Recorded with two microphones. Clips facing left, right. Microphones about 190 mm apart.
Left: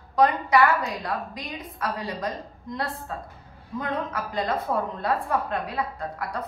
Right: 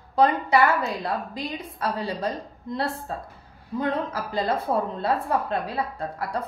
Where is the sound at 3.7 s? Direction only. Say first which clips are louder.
Right 3 dB; 30° right (ahead or behind).